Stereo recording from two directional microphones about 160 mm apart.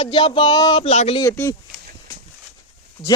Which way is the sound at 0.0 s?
30° left (ahead or behind).